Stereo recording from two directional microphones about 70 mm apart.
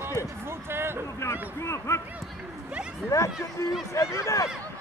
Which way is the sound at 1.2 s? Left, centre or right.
Left.